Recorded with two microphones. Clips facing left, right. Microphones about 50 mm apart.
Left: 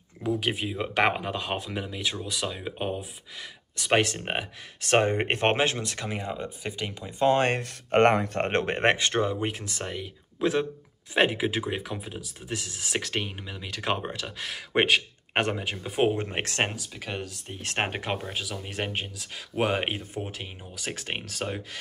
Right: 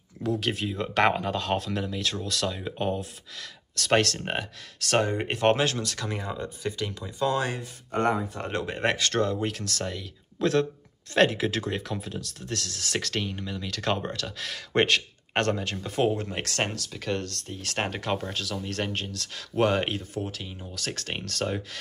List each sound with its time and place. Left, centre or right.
0.2 s speech: centre
7.1 s speech: left
8.9 s speech: left
10.4 s speech: centre; by 16.7 s left
17.0 s speech: centre
17.5 s speech: left
18.3 s speech: centre